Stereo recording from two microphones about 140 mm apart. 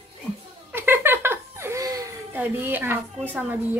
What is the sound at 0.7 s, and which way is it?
Giggle, 15° right (ahead or behind).